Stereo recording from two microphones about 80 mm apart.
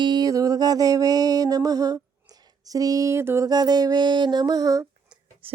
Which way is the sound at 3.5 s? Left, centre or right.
Right.